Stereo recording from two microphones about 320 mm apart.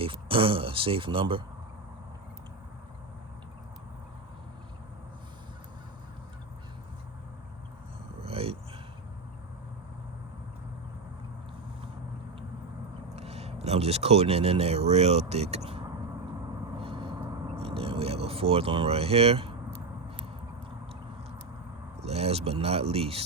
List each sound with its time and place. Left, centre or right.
0.0 s speech: centre
8.2 s a sound: centre
13.1 s speech: centre
16.7 s vehicle: centre
22.0 s speech: centre